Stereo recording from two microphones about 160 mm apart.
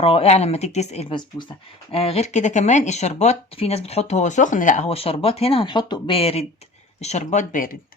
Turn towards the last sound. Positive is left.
turn(degrees=50)  # may be behind; listen again after turning